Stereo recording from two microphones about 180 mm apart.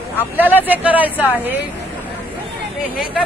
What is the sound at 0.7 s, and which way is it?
Speech, 10° right (ahead or behind).